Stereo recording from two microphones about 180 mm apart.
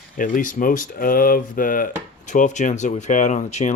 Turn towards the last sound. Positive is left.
turn(degrees=40)  # may be behind; listen again after turning